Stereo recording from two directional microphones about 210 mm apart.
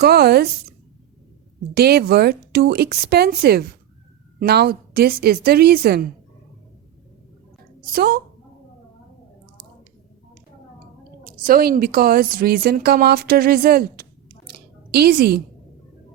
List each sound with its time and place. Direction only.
0.0 s a woman's voice: 50° right (ahead or behind)
1.7 s a woman's voice: 50° right (ahead or behind)
7.9 s a woman's voice: 45° right (ahead or behind)
11.2 s a woman's voice: 45° right (ahead or behind)